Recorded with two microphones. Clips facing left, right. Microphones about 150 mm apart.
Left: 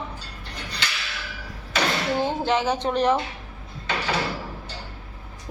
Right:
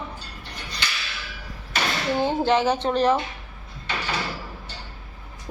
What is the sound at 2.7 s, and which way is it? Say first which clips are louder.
Speech: right 1 dB; 15° left (ahead or behind).